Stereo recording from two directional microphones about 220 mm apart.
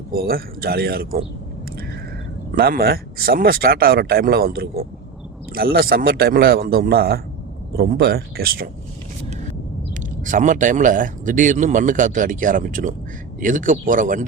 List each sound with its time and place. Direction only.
0.1 s speech: 45° right (ahead or behind)
2.6 s speech: 45° right (ahead or behind)
10.2 s speech: 35° right (ahead or behind)